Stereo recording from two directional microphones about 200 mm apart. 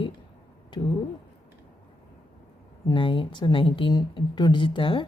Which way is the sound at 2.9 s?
25° left (ahead or behind).